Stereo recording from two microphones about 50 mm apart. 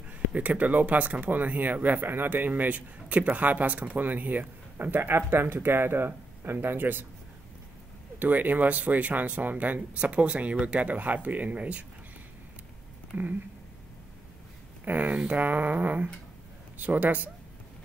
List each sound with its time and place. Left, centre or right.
0.3 s speech: right
8.2 s speech: right
13.1 s speech: right
14.9 s speech: right